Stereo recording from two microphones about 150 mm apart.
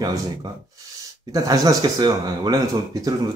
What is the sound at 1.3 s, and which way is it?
Speech, 25° right (ahead or behind).